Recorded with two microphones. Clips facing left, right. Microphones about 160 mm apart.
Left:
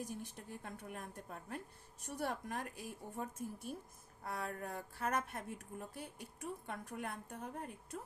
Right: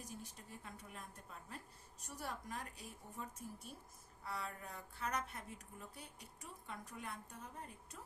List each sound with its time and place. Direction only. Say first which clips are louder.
0.1 s a woman's voice: left 6 dB; 60° left (ahead or behind)